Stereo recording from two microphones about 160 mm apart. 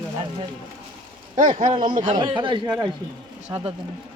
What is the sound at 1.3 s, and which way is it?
Speech, 50° right (ahead or behind).